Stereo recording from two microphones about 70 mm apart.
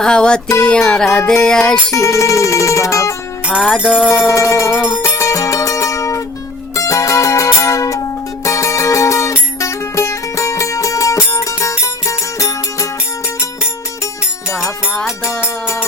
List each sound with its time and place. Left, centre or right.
0.0 s music: centre
1.9 s music: left
3.8 s music: centre
4.3 s music: left
14.6 s music: centre